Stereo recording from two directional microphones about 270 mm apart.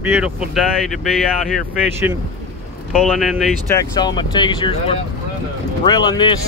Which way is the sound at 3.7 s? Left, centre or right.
Centre.